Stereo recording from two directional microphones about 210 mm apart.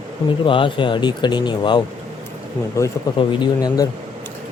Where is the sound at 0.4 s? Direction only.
25° left (ahead or behind).